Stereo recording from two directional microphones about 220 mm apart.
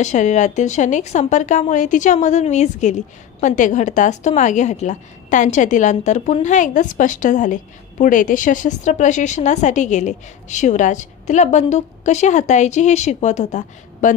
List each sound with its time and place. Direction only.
0.0 s a woman's voice: 35° left (ahead or behind)